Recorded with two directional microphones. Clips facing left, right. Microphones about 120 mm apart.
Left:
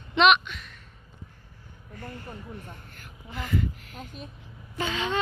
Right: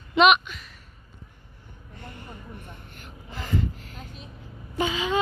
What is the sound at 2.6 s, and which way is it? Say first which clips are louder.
Speech: even; 20° right (ahead or behind).